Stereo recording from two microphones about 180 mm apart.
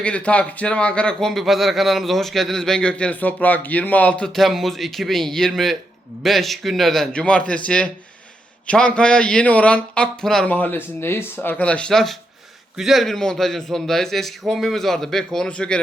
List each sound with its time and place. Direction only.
0.0 s a man's voice: 5° left (ahead or behind)